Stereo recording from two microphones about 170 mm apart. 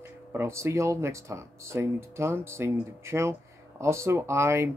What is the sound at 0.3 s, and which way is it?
Speech, 15° right (ahead or behind).